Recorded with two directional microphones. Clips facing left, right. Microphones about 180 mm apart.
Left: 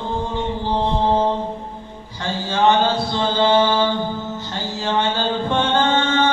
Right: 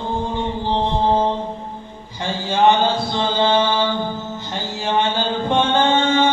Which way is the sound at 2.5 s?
15° right (ahead or behind).